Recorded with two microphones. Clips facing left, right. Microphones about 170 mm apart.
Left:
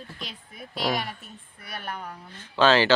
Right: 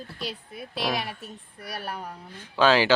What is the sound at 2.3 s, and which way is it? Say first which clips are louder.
Speech: even; 10° right (ahead or behind).